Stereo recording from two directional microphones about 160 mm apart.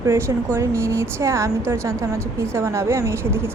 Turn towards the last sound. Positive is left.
turn(degrees=-15)  # may be behind; listen again after turning